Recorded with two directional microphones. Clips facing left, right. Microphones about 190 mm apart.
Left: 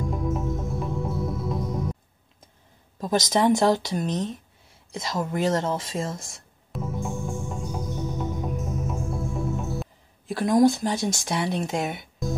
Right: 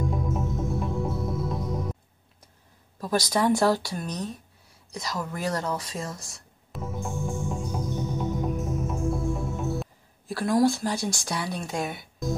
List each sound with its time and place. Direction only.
0.1 s music: centre (ahead or behind)
3.0 s speech: 20° left (ahead or behind)
6.7 s music: centre (ahead or behind)
10.2 s speech: 20° left (ahead or behind)